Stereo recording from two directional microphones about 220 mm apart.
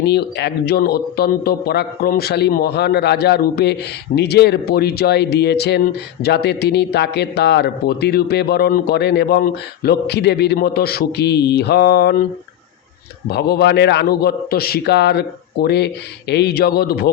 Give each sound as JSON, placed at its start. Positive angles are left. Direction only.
{"t": 0.0, "sound": "a man's voice", "side_deg": 50}